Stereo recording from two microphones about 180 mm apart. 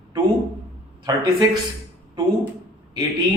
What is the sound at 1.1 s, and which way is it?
Speech, 20° right (ahead or behind).